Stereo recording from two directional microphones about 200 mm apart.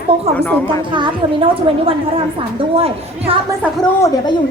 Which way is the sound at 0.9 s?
25° right (ahead or behind).